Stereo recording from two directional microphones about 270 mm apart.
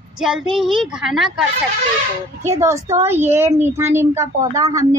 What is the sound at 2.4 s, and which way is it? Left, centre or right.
Speech, centre.